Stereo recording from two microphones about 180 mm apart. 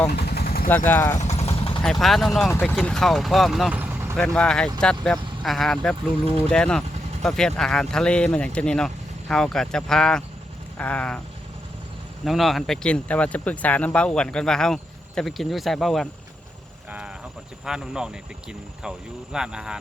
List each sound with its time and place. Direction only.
0.1 s vehicle: 65° left (ahead or behind)
0.9 s vehicle: 15° left (ahead or behind)
1.2 s vehicle: 40° left (ahead or behind)
1.8 s speech: centre (ahead or behind)
4.4 s speech: 5° left (ahead or behind)
10.8 s vehicle: 5° left (ahead or behind)
12.2 s speech: centre (ahead or behind)
17.7 s speech: 5° right (ahead or behind)